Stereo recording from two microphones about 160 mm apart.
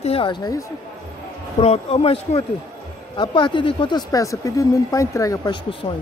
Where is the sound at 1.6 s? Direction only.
40° left (ahead or behind).